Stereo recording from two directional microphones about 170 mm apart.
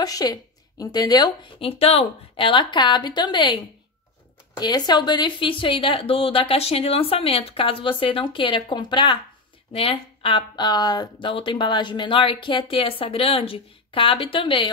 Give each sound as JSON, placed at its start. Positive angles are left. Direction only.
{"t": 0.0, "sound": "a woman's voice", "side_deg": 20}